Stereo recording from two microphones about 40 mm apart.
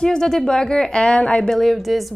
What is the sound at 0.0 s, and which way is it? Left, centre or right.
Speech, centre.